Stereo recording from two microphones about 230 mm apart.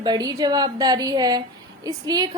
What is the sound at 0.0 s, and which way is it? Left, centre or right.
A woman's voice, centre.